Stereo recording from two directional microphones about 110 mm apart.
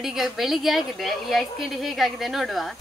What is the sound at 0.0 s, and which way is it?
A woman's voice, centre (ahead or behind).